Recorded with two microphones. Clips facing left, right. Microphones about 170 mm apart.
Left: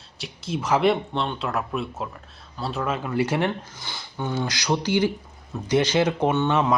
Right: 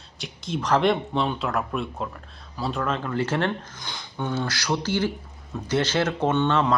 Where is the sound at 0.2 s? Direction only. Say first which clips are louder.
Even; 5° left (ahead or behind).